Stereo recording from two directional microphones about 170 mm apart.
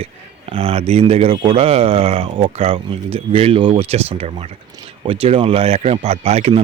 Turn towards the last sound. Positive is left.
turn(degrees=-40)  # may be behind; listen again after turning